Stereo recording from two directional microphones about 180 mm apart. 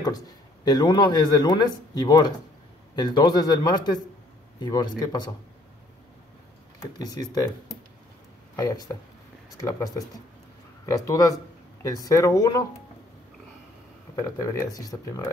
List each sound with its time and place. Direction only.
0.7 s speech: 25° left (ahead or behind)
7.0 s speech: 20° left (ahead or behind)
14.4 s speech: 20° left (ahead or behind)